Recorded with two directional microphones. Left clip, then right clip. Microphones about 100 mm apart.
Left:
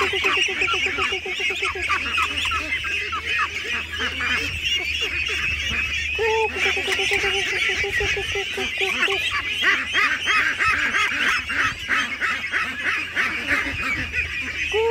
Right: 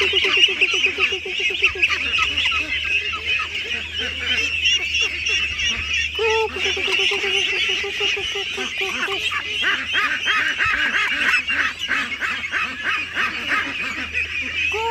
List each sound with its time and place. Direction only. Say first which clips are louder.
0.0 s goose: right 3 dB; 35° left (ahead or behind)
4.3 s goose: right 7 dB; 45° left (ahead or behind)
9.6 s quack: left 1 dB; 20° left (ahead or behind)
12.5 s honk: right 1 dB; 10° left (ahead or behind)